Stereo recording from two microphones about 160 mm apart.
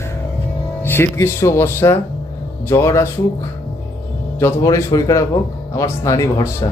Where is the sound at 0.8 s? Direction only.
15° left (ahead or behind).